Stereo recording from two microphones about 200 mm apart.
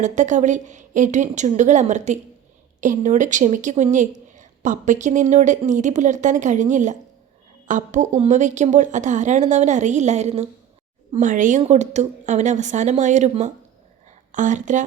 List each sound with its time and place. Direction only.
0.0 s a woman's voice: 35° right (ahead or behind)